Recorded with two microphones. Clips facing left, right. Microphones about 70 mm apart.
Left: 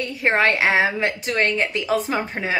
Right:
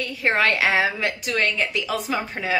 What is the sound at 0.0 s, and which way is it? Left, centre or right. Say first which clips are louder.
A woman's voice: left 2 dB; left.